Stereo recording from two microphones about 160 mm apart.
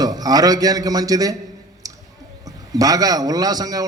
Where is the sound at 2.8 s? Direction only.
25° right (ahead or behind).